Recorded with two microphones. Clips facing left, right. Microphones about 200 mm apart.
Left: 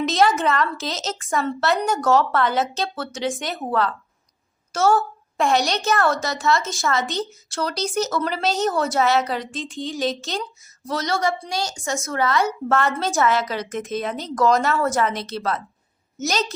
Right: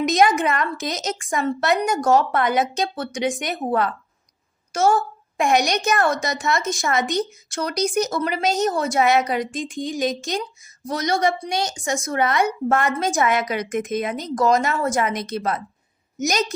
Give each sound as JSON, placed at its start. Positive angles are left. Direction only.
{"t": 0.0, "sound": "a woman's voice", "side_deg": -15}